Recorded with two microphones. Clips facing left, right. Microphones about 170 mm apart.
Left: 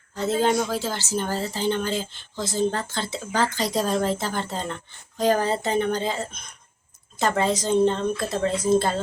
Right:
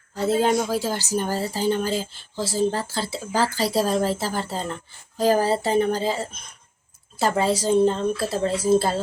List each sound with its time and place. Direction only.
0.2 s speech: 10° right (ahead or behind)